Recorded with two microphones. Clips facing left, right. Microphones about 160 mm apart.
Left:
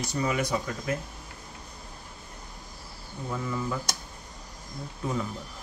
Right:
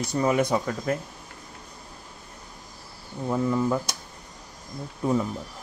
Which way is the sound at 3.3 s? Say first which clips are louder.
Right 8 dB; 40° right (ahead or behind).